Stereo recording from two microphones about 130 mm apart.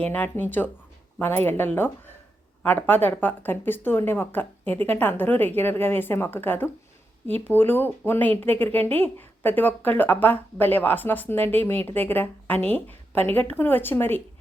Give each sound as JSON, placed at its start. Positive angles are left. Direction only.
{"t": 0.0, "sound": "speech", "side_deg": 15}